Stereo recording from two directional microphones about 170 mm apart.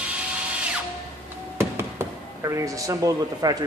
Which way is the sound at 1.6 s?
15° right (ahead or behind).